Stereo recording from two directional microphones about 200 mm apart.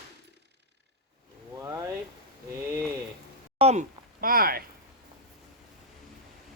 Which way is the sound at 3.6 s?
30° right (ahead or behind).